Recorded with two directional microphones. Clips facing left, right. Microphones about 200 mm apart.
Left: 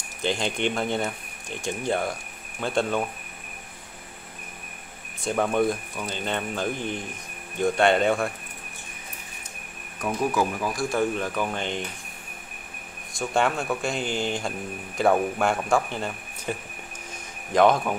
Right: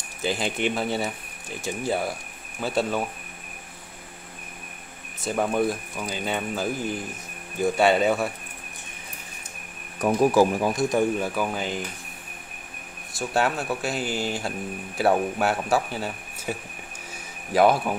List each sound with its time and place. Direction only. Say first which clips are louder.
0.2 s speech: even; 5° right (ahead or behind)
5.2 s speech: left 1 dB; 5° right (ahead or behind)
9.9 s speech: right 6 dB; 35° right (ahead or behind); by 11.8 s 5° right (ahead or behind)
13.1 s speech: even; 5° right (ahead or behind)